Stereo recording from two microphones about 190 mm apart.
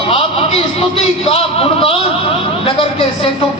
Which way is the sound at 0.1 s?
30° left (ahead or behind).